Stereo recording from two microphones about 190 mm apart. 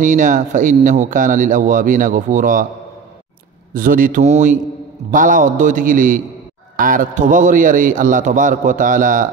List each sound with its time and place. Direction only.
0.0 s speech: 40° right (ahead or behind)
3.7 s speech: 45° right (ahead or behind)